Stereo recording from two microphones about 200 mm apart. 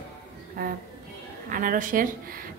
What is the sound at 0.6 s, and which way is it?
A woman's voice, 50° right (ahead or behind).